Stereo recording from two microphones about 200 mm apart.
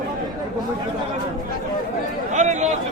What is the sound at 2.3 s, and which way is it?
Speech, 35° right (ahead or behind).